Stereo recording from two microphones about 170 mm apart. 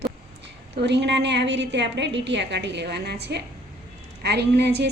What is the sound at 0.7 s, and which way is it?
A woman's voice, 90° right.